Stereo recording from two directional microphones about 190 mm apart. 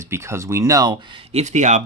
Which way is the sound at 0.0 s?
15° right (ahead or behind).